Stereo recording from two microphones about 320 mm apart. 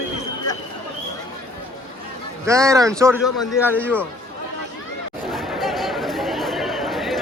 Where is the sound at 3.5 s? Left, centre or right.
Centre.